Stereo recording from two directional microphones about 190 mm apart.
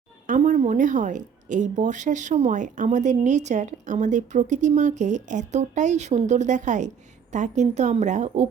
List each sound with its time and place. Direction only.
0.3 s a woman's voice: 40° right (ahead or behind)